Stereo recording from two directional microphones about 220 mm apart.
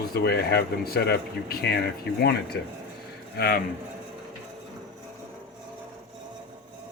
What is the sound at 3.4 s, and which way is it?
Speech, 45° left (ahead or behind).